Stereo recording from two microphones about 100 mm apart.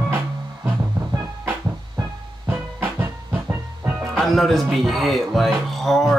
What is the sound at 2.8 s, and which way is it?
Music, 20° right (ahead or behind).